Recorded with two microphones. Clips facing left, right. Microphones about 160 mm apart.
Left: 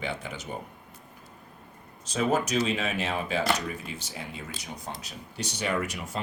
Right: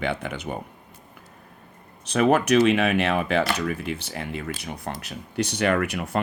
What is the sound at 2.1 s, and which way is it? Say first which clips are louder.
Speech: right 7 dB; 70° right (ahead or behind).